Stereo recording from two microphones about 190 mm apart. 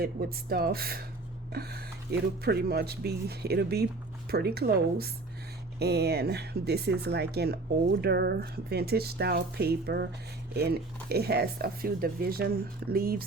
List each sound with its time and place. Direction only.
0.0 s speech: 55° right (ahead or behind)